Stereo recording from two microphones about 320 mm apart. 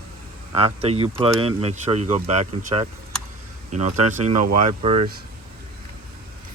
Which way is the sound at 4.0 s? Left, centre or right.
Right.